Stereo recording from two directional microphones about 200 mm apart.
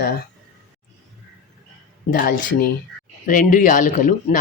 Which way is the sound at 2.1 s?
45° left (ahead or behind).